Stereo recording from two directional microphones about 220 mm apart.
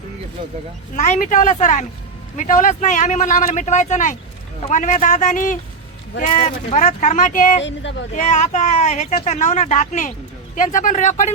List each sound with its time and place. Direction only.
0.9 s speech: 35° left (ahead or behind)
7.6 s speech: 55° left (ahead or behind)
8.1 s speech: 35° left (ahead or behind)